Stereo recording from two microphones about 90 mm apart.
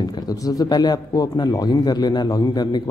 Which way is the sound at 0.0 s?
50° left (ahead or behind).